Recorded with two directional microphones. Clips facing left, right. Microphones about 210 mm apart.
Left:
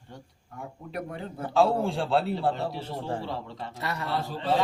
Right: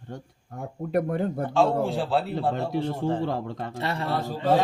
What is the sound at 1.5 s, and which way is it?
A man's voice, centre (ahead or behind).